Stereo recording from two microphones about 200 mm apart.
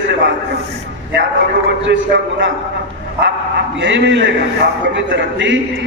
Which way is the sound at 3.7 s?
65° right (ahead or behind).